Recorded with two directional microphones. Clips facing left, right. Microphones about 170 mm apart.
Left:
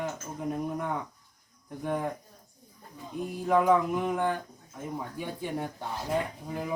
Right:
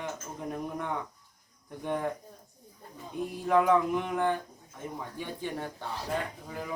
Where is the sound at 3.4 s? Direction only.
Centre (ahead or behind).